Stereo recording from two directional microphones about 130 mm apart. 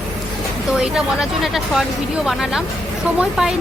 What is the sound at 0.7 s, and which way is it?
Speech, 5° right (ahead or behind).